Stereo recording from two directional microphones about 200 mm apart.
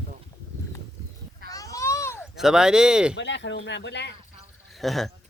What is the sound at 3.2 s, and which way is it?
Speech, 65° left (ahead or behind).